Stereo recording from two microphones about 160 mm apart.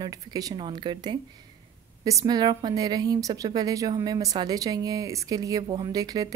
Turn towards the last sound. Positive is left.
turn(degrees=-25)  # may be behind; listen again after turning